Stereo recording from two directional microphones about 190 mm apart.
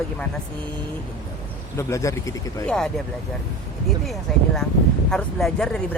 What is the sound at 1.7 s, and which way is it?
Speech, 15° left (ahead or behind).